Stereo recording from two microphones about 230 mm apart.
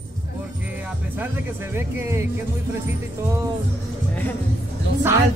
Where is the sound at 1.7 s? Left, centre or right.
Centre.